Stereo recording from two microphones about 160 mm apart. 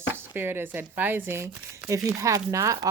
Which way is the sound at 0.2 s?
15° right (ahead or behind).